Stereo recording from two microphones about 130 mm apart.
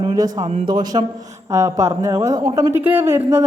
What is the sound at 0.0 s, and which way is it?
Speech, 30° right (ahead or behind).